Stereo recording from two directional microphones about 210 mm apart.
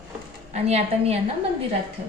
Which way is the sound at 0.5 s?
30° right (ahead or behind).